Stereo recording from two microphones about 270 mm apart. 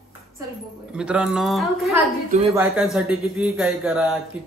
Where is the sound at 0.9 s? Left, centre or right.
Centre.